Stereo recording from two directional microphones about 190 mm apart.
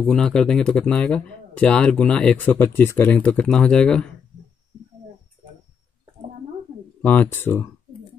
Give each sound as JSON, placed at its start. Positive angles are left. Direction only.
{"t": 0.0, "sound": "speech", "side_deg": 5}
{"t": 7.0, "sound": "speech", "side_deg": 10}